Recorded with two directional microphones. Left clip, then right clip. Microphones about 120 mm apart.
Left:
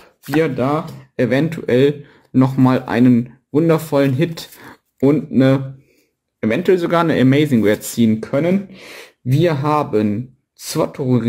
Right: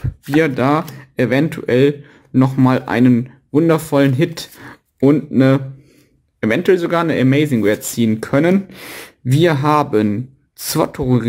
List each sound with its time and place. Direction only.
0.0 s a sound: 20° right (ahead or behind)
0.6 s speech: 40° right (ahead or behind)
1.1 s speech: 20° right (ahead or behind)
1.7 s speech: 5° right (ahead or behind)
5.1 s speech: 5° right (ahead or behind)
6.4 s speech: 20° right (ahead or behind)
6.9 s speech: centre (ahead or behind)
8.2 s speech: 40° right (ahead or behind)